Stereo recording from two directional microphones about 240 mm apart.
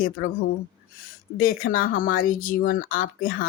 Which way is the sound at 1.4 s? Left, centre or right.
Left.